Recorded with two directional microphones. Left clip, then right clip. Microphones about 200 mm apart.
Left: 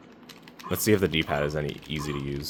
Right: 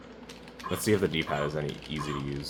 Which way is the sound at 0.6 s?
40° left (ahead or behind).